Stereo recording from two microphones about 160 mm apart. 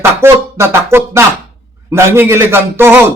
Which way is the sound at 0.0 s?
15° right (ahead or behind).